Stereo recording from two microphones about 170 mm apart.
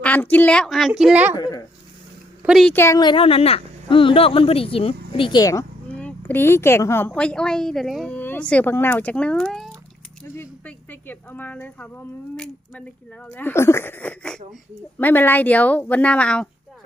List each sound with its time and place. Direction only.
0.0 s a woman's voice: 10° left (ahead or behind); by 1.4 s 10° right (ahead or behind)
1.4 s speech: 20° left (ahead or behind)
2.4 s speech: centre (ahead or behind)
2.7 s a woman's voice: 15° left (ahead or behind)
10.2 s speech: 15° left (ahead or behind)